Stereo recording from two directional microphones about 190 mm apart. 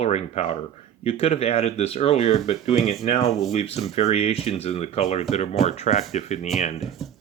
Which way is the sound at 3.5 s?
35° left (ahead or behind).